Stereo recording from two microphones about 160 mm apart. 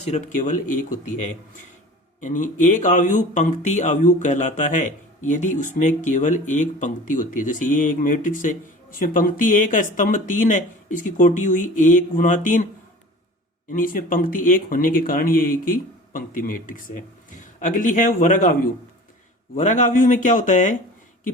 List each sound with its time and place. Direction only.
0.0 s speech: 50° left (ahead or behind)
13.7 s speech: 60° left (ahead or behind)